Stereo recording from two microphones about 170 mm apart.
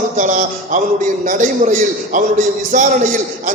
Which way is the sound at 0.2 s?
45° right (ahead or behind).